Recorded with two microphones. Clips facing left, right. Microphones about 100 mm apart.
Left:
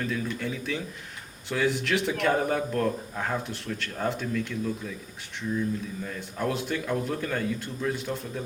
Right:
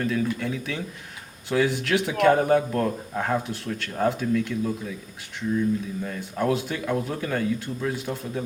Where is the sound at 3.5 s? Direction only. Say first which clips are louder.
Right 3 dB; 5° right (ahead or behind).